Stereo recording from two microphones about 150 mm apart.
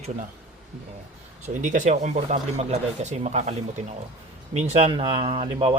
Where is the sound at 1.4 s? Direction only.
55° right (ahead or behind).